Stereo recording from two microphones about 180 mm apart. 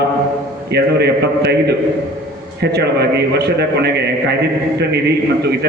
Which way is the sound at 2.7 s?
65° right (ahead or behind).